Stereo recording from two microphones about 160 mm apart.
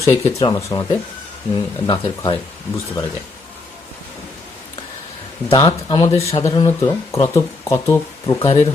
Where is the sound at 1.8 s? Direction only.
30° left (ahead or behind).